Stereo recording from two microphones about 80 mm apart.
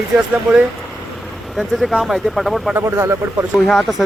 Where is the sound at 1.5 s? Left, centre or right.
Centre.